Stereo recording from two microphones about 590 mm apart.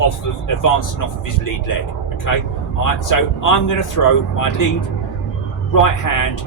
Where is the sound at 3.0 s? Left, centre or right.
Left.